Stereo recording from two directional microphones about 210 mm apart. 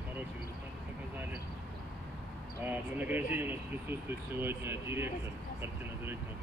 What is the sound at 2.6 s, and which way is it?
Speech, 10° right (ahead or behind).